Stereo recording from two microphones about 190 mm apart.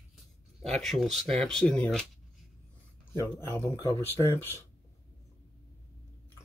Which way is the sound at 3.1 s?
15° left (ahead or behind).